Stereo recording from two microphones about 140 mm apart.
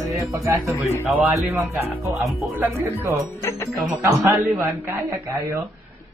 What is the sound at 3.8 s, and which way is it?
Speech, 20° right (ahead or behind).